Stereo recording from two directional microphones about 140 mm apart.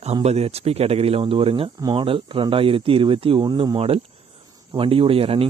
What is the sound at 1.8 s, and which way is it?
Speech, 30° right (ahead or behind).